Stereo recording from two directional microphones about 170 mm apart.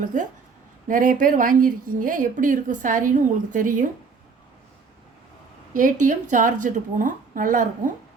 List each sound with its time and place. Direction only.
0.0 s a woman's voice: 50° right (ahead or behind)
5.7 s a woman's voice: 50° right (ahead or behind)